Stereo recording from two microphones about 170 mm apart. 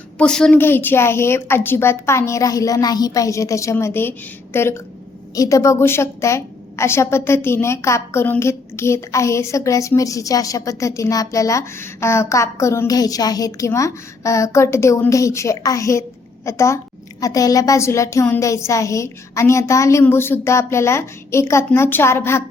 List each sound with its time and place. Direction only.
0.2 s a woman's voice: 5° left (ahead or behind)